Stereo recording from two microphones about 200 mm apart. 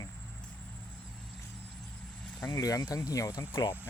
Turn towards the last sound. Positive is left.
turn(degrees=15)  # may be behind; listen again after turning